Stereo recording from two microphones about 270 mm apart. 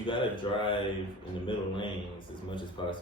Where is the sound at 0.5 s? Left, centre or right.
Centre.